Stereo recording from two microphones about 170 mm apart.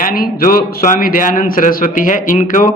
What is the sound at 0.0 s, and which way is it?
A man's voice, 60° left (ahead or behind).